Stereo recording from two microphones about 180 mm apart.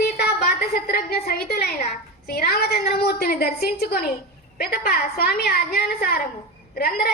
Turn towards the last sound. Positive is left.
turn(degrees=55)  # may be behind; listen again after turning